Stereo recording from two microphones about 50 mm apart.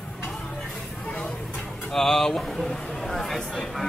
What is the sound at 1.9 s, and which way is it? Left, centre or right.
A man's voice, centre.